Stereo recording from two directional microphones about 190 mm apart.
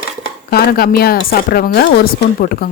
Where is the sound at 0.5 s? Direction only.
55° left (ahead or behind).